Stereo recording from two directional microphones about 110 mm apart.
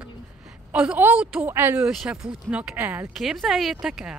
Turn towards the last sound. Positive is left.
turn(degrees=-5)  # may be behind; listen again after turning